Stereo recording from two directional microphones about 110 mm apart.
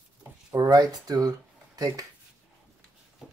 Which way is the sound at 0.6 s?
35° right (ahead or behind).